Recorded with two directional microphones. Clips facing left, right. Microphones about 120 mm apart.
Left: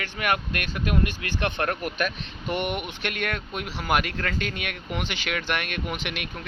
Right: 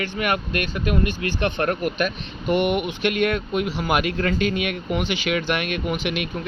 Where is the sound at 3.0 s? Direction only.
10° right (ahead or behind).